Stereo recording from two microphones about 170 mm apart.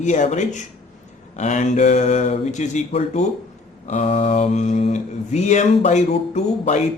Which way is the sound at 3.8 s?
35° left (ahead or behind).